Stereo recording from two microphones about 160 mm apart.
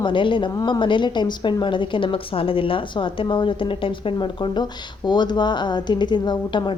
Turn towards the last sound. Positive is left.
turn(degrees=30)  # may be behind; listen again after turning